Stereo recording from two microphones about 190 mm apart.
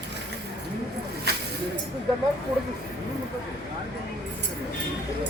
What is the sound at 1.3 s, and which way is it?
Snake, 60° right (ahead or behind).